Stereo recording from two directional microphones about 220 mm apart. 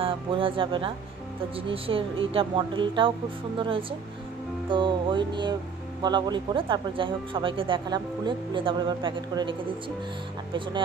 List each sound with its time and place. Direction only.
0.0 s speech: 25° right (ahead or behind)